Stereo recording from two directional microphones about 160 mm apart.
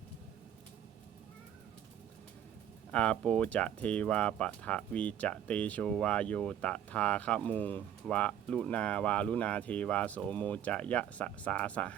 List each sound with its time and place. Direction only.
2.9 s speech: 5° left (ahead or behind)